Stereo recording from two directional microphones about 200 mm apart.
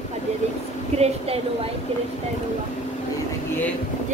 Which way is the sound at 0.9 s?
30° right (ahead or behind).